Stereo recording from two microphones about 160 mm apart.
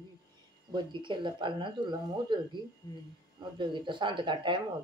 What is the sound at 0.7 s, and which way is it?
Speech, 30° right (ahead or behind).